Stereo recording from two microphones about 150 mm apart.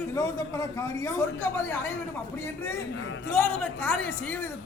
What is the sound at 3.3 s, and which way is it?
Speech, 10° left (ahead or behind).